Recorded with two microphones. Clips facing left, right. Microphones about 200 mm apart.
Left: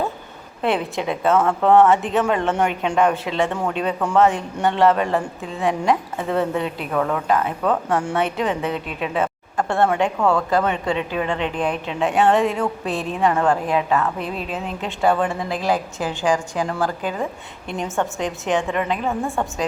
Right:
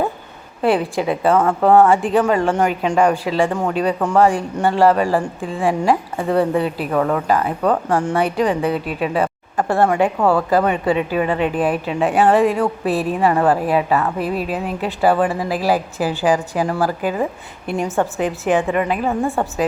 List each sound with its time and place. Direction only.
0.6 s speech: centre (ahead or behind)
10.2 s speech: 35° right (ahead or behind)
10.5 s speech: 5° right (ahead or behind)